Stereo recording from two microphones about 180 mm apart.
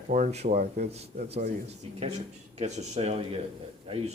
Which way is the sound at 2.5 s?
40° right (ahead or behind).